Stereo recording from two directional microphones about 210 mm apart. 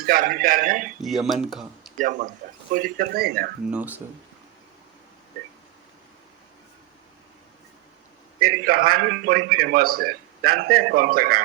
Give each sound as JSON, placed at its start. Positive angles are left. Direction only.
{"t": 0.0, "sound": "a man's voice", "side_deg": -40}
{"t": 1.0, "sound": "speech", "side_deg": 0}
{"t": 2.0, "sound": "a man's voice", "side_deg": -40}
{"t": 2.4, "sound": "a sound", "side_deg": -40}
{"t": 2.7, "sound": "a man's voice", "side_deg": -40}
{"t": 3.7, "sound": "speech", "side_deg": -10}
{"t": 8.4, "sound": "a man's voice", "side_deg": -45}